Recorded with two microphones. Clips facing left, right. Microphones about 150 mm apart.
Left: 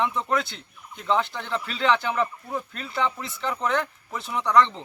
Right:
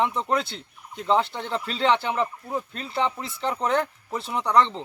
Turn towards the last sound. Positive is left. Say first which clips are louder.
# left 1 dB
turn(degrees=-30)  # may be behind; listen again after turning